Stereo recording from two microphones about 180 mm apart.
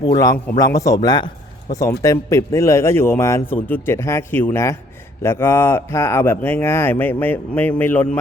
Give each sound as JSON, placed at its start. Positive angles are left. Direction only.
{"t": 0.0, "sound": "a man's voice", "side_deg": 20}